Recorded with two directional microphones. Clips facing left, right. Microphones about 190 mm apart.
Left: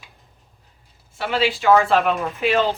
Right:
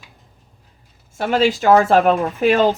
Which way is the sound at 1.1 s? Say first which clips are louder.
Right 5 dB; 45° right (ahead or behind).